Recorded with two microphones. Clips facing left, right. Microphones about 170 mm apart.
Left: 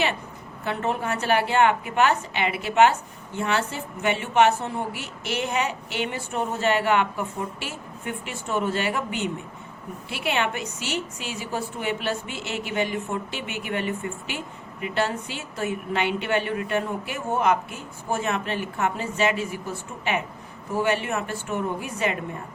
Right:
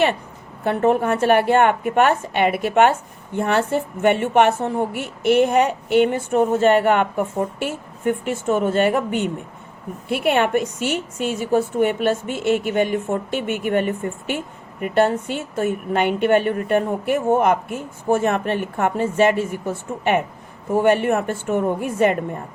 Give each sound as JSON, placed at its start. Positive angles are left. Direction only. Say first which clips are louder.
{"t": 0.6, "sound": "a woman's voice", "louder": "right 9 dB", "side_deg": -50}